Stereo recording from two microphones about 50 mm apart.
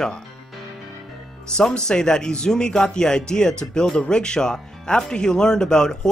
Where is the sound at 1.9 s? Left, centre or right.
Centre.